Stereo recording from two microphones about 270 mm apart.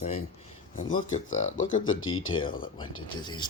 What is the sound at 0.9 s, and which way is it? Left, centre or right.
Speech, left.